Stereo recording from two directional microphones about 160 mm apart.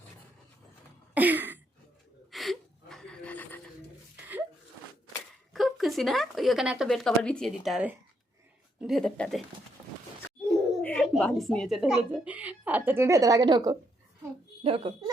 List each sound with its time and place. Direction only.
1.1 s a sound: 10° right (ahead or behind)
2.3 s gasp: centre (ahead or behind)
5.5 s a woman's voice: centre (ahead or behind)
10.8 s a sound: 5° left (ahead or behind)
11.2 s speech: 5° left (ahead or behind); by 13.7 s 25° right (ahead or behind)
14.6 s speech: 40° right (ahead or behind)